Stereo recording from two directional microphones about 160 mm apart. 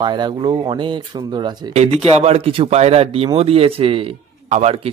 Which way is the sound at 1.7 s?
40° right (ahead or behind).